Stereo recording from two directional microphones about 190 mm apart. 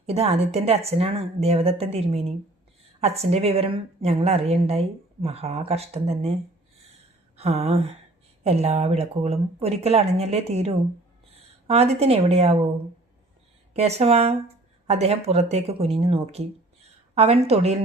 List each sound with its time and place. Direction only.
0.0 s a woman's voice: 35° right (ahead or behind)
7.3 s a woman's voice: 35° right (ahead or behind)
13.7 s a woman's voice: 35° right (ahead or behind)